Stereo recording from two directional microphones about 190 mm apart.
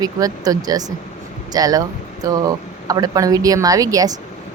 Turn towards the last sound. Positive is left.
turn(degrees=-20)  # may be behind; listen again after turning